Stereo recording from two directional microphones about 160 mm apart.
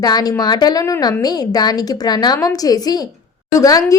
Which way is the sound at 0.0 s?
25° left (ahead or behind).